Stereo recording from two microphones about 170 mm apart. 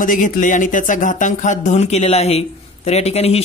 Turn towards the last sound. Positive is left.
turn(degrees=40)  # may be behind; listen again after turning